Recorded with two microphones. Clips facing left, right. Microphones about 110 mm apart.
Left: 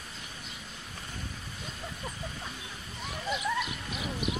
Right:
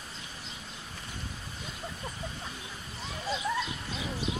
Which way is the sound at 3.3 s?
25° right (ahead or behind).